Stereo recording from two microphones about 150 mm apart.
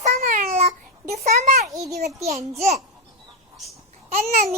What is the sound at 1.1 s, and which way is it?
A child's voice, 50° right (ahead or behind).